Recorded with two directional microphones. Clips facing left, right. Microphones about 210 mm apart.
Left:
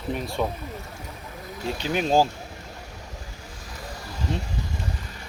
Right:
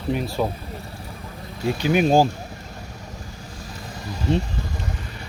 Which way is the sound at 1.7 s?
10° right (ahead or behind).